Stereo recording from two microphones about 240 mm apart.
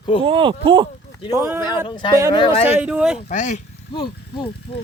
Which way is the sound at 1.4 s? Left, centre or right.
Centre.